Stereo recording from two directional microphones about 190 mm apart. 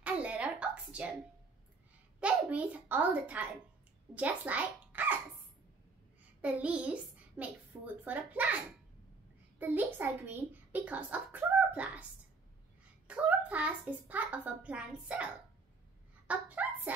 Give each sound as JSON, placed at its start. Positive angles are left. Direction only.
{"t": 0.0, "sound": "a sound", "side_deg": -5}
{"t": 2.1, "sound": "a child's voice", "side_deg": -5}
{"t": 6.4, "sound": "a child's voice", "side_deg": -5}
{"t": 9.6, "sound": "a child's voice", "side_deg": -10}
{"t": 13.0, "sound": "a child's voice", "side_deg": -5}
{"t": 16.3, "sound": "speech", "side_deg": -10}